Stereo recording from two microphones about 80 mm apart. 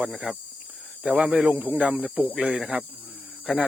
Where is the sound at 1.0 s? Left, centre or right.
Centre.